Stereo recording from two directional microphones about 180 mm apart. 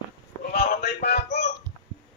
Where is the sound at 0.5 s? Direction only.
60° left (ahead or behind).